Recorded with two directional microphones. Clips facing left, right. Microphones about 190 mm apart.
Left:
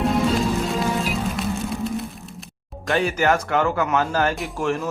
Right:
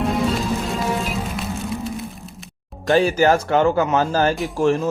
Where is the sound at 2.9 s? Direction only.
30° right (ahead or behind).